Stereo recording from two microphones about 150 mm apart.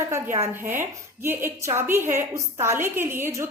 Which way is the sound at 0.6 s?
15° right (ahead or behind).